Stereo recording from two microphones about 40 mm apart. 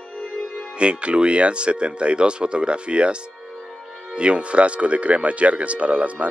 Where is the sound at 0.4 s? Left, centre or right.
Left.